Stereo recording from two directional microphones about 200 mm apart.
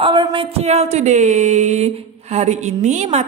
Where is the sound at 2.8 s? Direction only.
35° right (ahead or behind).